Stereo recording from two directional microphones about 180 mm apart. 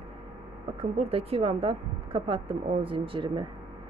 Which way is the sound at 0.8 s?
35° right (ahead or behind).